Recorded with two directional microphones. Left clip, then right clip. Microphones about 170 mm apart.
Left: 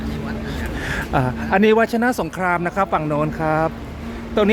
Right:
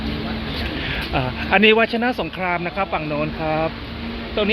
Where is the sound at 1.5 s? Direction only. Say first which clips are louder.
Right 1 dB; 20° left (ahead or behind).